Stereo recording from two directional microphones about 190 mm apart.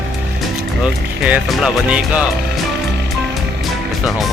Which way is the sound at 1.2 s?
5° right (ahead or behind).